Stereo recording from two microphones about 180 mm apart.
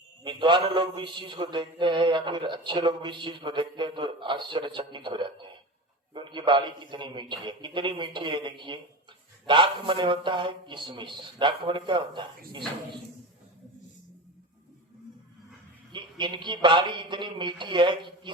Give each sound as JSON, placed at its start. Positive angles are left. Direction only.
{"t": 0.3, "sound": "mantra", "side_deg": -25}
{"t": 15.9, "sound": "mantra", "side_deg": -25}